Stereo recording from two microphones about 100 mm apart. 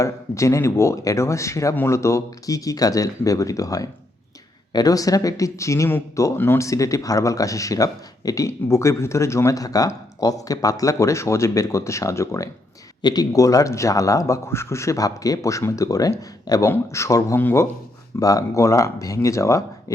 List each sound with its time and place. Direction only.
0.0 s speech: 30° left (ahead or behind)
13.0 s speech: 45° left (ahead or behind); by 17.7 s 25° left (ahead or behind)
18.2 s speech: 35° left (ahead or behind)